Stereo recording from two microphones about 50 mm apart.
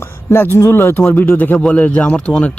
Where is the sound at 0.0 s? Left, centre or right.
Left.